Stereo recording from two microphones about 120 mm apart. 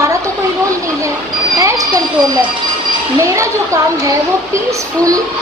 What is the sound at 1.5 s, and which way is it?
Speech, 25° right (ahead or behind).